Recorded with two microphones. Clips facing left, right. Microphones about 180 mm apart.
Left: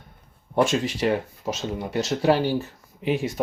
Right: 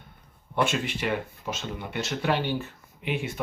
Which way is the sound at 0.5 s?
40° left (ahead or behind).